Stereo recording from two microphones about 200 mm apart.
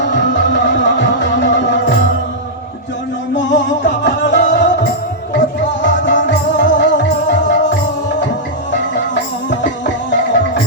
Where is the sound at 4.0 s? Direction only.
60° left (ahead or behind).